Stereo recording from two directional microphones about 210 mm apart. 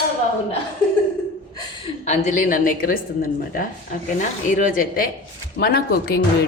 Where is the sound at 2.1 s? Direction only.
35° left (ahead or behind).